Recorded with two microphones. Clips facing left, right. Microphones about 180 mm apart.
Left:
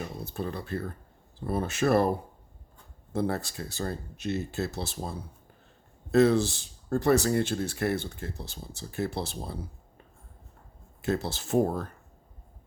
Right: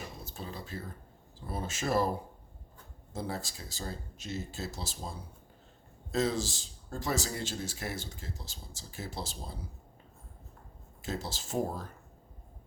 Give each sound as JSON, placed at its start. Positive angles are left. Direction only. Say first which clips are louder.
{"t": 0.0, "sound": "a sound", "louder": "left 9 dB", "side_deg": 60}
{"t": 1.4, "sound": "speech", "louder": "left 9 dB", "side_deg": 60}
{"t": 11.0, "sound": "speech", "louder": "left 8 dB", "side_deg": 60}